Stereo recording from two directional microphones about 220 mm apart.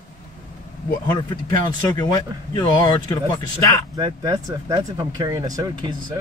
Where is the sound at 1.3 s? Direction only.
20° left (ahead or behind).